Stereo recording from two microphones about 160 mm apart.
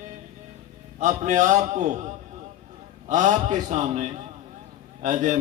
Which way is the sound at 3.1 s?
50° right (ahead or behind).